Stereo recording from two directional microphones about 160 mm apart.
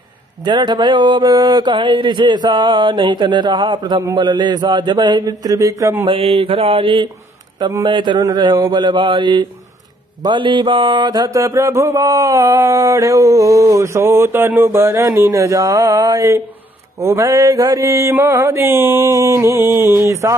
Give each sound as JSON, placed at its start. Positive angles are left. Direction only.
{"t": 0.4, "sound": "mantra", "side_deg": -30}
{"t": 6.0, "sound": "mantra", "side_deg": -40}